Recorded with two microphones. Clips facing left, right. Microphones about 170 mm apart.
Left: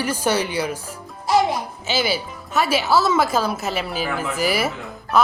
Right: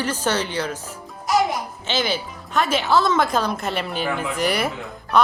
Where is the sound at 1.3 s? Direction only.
30° left (ahead or behind).